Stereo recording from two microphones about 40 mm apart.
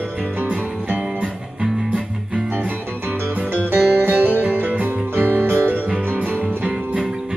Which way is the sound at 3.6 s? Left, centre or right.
Right.